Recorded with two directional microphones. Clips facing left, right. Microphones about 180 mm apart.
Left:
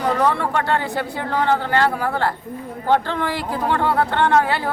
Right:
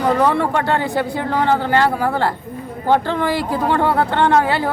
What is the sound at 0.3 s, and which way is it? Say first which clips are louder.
Speech: right 3 dB; 15° right (ahead or behind).